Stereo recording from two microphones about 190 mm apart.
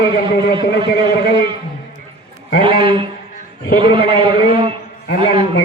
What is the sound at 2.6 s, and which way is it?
A man's voice, 30° right (ahead or behind).